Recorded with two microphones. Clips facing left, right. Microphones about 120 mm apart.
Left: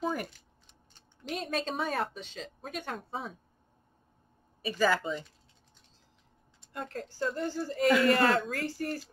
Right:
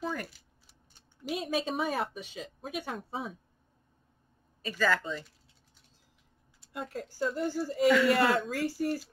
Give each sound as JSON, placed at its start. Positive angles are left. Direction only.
{"t": 0.0, "sound": "a sound", "side_deg": 15}
{"t": 0.3, "sound": "speech", "side_deg": -10}
{"t": 4.6, "sound": "speech", "side_deg": 15}
{"t": 6.6, "sound": "speech", "side_deg": -5}